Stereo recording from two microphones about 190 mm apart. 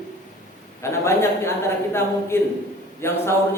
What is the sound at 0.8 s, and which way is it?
Speech, 15° left (ahead or behind).